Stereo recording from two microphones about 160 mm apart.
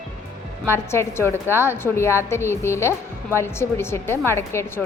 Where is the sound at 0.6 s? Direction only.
15° left (ahead or behind).